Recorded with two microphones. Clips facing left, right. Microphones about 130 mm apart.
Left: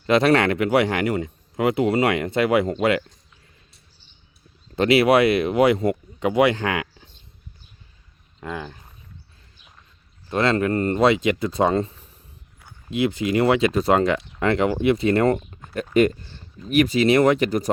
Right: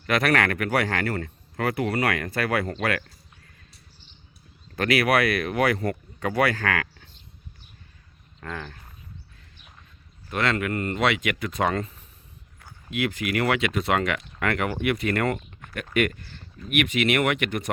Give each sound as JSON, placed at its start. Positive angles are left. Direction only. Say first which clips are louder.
{"t": 0.0, "sound": "speech", "louder": "left 6 dB", "side_deg": 25}
{"t": 4.7, "sound": "speech", "louder": "left 6 dB", "side_deg": 25}
{"t": 8.4, "sound": "speech", "louder": "left 4 dB", "side_deg": 15}
{"t": 10.2, "sound": "speech", "louder": "left 5 dB", "side_deg": 30}
{"t": 16.7, "sound": "speech", "louder": "left 6 dB", "side_deg": 35}